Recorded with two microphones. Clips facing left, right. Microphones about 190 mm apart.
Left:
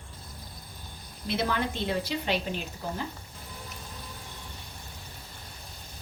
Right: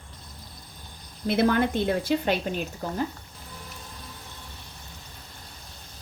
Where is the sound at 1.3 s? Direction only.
55° right (ahead or behind).